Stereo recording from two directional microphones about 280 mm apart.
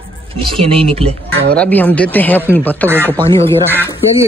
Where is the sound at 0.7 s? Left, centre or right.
Centre.